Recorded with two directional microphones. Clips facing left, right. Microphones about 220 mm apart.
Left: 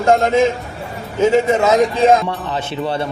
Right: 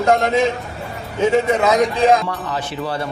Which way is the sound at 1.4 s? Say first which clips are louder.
Left 2 dB; 25° left (ahead or behind).